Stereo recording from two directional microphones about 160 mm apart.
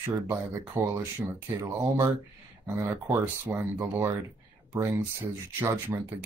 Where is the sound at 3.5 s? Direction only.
15° right (ahead or behind).